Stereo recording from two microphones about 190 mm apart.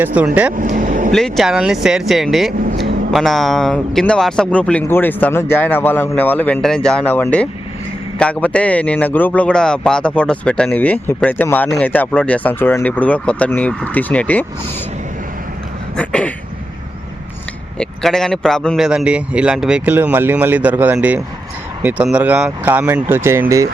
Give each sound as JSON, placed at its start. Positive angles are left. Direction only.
{"t": 0.0, "sound": "speech", "side_deg": -10}
{"t": 0.5, "sound": "vehicle", "side_deg": -45}
{"t": 1.1, "sound": "a man's voice", "side_deg": 0}
{"t": 16.0, "sound": "a man's voice", "side_deg": 5}
{"t": 17.7, "sound": "a man's voice", "side_deg": 0}